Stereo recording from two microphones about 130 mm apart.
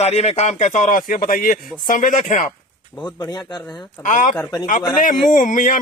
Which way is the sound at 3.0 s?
30° left (ahead or behind).